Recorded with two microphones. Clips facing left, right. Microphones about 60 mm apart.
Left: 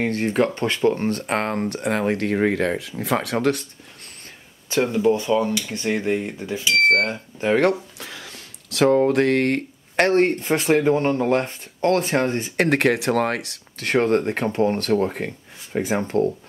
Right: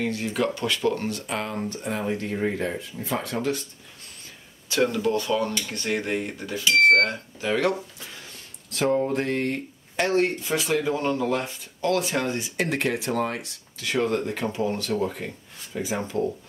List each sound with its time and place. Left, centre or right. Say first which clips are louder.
0.0 s speech: left 5 dB; left
1.2 s speech: left 6 dB; left
4.6 s speech: left 4 dB; left
7.3 s speech: left 6 dB; left
8.0 s speech: left 5 dB; left